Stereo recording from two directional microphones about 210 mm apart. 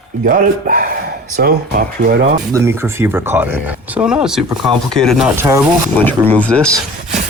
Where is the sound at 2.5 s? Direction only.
10° right (ahead or behind).